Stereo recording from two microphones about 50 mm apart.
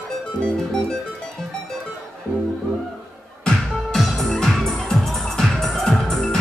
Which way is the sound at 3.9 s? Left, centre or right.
Centre.